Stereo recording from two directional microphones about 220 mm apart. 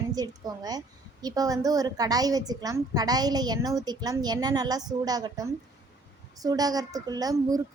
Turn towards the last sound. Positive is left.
turn(degrees=-15)  # may be behind; listen again after turning